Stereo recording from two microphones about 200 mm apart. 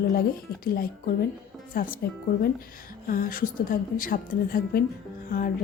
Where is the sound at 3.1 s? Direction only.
45° left (ahead or behind).